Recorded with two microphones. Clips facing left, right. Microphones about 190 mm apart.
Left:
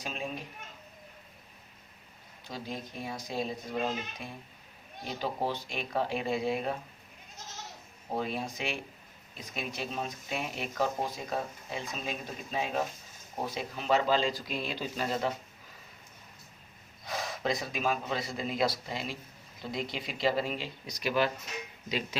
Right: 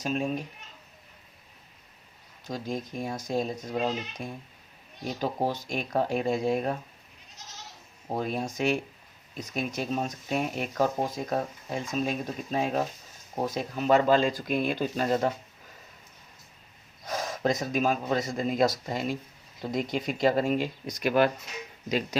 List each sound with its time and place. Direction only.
0.0 s speech: 45° right (ahead or behind)
2.5 s speech: 45° right (ahead or behind)
8.1 s speech: 45° right (ahead or behind)
17.1 s speech: 45° right (ahead or behind)